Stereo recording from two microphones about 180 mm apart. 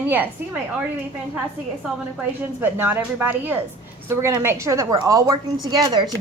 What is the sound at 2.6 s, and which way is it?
A woman's voice, 10° right (ahead or behind).